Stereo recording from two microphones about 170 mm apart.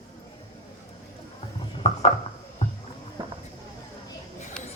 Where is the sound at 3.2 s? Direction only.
25° right (ahead or behind).